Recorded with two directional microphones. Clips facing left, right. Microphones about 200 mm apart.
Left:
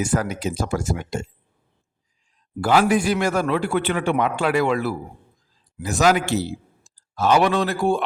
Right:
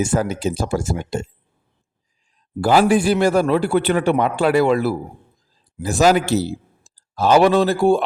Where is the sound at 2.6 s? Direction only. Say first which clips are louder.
Right 3 dB; 30° right (ahead or behind).